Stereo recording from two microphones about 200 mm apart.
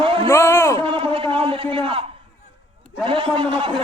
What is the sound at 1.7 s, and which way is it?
A man's voice, 25° right (ahead or behind).